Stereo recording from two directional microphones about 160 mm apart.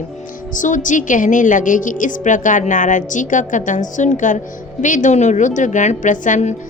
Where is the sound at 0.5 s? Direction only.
55° left (ahead or behind).